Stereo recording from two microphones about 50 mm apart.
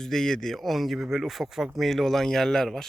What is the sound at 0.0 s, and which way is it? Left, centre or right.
Speech, centre.